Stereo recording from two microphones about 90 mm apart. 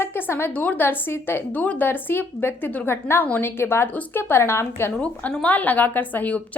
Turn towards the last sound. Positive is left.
turn(degrees=20)  # may be behind; listen again after turning